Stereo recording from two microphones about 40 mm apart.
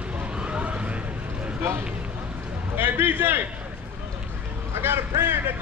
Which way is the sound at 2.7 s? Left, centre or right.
Right.